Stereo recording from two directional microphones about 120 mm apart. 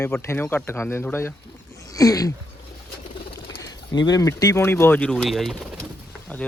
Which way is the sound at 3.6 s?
30° left (ahead or behind).